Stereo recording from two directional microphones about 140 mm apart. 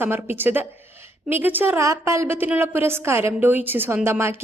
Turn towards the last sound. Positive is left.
turn(degrees=-20)  # may be behind; listen again after turning